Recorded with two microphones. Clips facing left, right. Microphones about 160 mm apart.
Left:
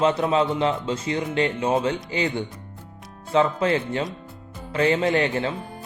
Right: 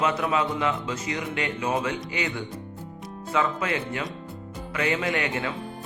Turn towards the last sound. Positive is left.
turn(degrees=30)  # may be behind; listen again after turning